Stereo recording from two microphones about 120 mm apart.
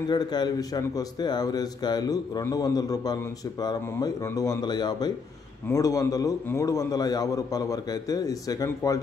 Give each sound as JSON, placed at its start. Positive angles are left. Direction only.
{"t": 0.1, "sound": "a man's voice", "side_deg": 35}